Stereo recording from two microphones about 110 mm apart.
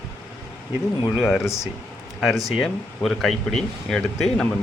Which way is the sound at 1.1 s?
Centre (ahead or behind).